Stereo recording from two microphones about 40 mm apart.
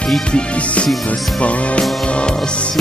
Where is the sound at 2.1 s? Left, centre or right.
Left.